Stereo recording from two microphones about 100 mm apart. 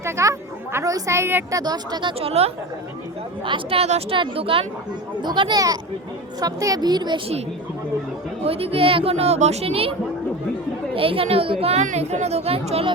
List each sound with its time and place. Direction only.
0.0 s a woman's voice: 30° right (ahead or behind)
1.5 s speech: 40° right (ahead or behind)
3.4 s a woman's voice: 55° right (ahead or behind)
3.8 s a woman's voice: 75° right (ahead or behind)
5.2 s speech: 50° right (ahead or behind)
8.4 s speech: 75° right (ahead or behind)
10.9 s speech: 65° right (ahead or behind)